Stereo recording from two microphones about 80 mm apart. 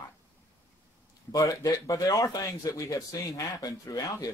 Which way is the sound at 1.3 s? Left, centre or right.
Left.